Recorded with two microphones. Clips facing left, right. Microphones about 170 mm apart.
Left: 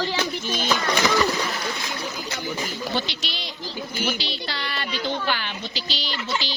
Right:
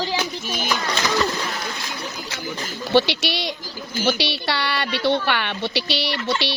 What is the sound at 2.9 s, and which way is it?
A woman's voice, 75° right (ahead or behind).